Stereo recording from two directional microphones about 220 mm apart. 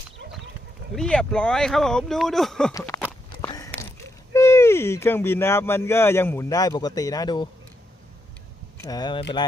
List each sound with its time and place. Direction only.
0.9 s speech: 5° left (ahead or behind)
2.7 s speech: 15° left (ahead or behind)
3.4 s a sound: 15° left (ahead or behind)
4.4 s speech: 10° left (ahead or behind)
8.8 s speech: 20° left (ahead or behind)